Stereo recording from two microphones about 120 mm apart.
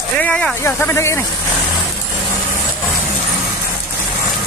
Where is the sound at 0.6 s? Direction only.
20° left (ahead or behind).